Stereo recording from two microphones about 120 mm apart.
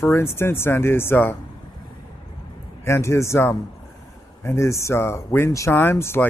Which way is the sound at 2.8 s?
20° left (ahead or behind).